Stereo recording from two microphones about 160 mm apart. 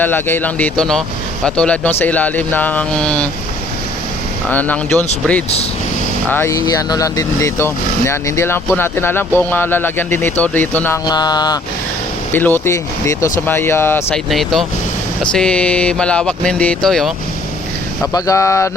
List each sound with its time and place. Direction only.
0.0 s speech: 10° left (ahead or behind)
4.4 s speech: 10° left (ahead or behind)
6.2 s speech: 15° left (ahead or behind)
11.0 s mantra: 25° left (ahead or behind)
12.3 s speech: 10° left (ahead or behind)
14.3 s speech: centre (ahead or behind)
18.1 s mantra: 20° left (ahead or behind)